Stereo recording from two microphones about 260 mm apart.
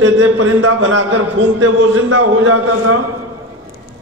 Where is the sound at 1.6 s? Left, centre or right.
Right.